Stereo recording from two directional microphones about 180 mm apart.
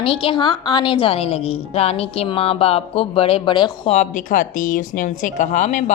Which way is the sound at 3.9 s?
45° left (ahead or behind).